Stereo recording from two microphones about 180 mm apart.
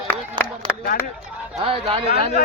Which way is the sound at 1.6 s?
30° right (ahead or behind).